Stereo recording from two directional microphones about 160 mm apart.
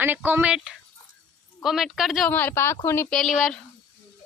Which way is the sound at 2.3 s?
10° left (ahead or behind).